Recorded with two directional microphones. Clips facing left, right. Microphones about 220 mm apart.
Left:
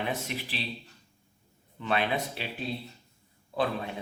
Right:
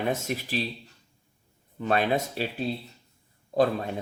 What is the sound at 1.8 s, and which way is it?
Speech, 45° right (ahead or behind).